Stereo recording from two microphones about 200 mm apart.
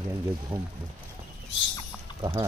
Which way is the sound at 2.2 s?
15° right (ahead or behind).